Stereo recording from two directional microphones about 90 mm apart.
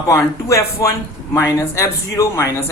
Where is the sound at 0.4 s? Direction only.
35° left (ahead or behind).